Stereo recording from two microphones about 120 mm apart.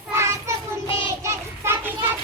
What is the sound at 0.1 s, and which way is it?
Child singing, 25° right (ahead or behind).